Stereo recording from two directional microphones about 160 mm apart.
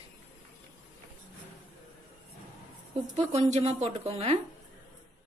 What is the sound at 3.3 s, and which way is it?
Speech, 45° right (ahead or behind).